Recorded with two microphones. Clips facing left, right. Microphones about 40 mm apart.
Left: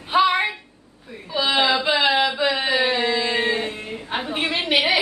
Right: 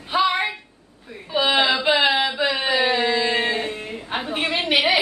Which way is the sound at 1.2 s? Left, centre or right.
Centre.